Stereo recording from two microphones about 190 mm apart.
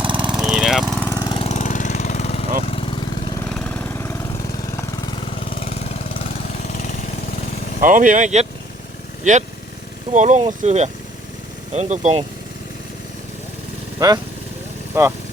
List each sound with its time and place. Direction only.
0.0 s vehicle: 25° right (ahead or behind)
0.3 s vehicle: 5° right (ahead or behind)
0.9 s engine: 10° left (ahead or behind)
1.2 s engine: 25° left (ahead or behind)
1.5 s jackhammer: 40° left (ahead or behind)
2.6 s lawn mower: 30° left (ahead or behind)
3.4 s engine: 5° left (ahead or behind)
5.5 s vehicle: 30° left (ahead or behind)
7.8 s speech: 45° right (ahead or behind)
10.1 s speech: 40° right (ahead or behind)
14.0 s speech: 15° right (ahead or behind)